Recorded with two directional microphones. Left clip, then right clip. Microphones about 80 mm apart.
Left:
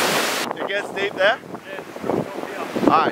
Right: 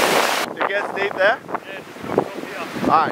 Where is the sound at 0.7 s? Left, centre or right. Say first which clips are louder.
Right 2 dB; centre.